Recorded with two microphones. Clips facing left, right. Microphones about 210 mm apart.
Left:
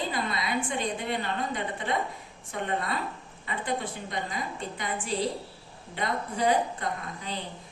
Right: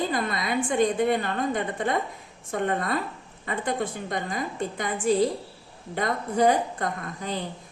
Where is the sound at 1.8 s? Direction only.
50° right (ahead or behind).